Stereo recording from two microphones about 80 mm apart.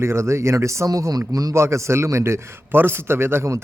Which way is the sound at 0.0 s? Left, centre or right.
Right.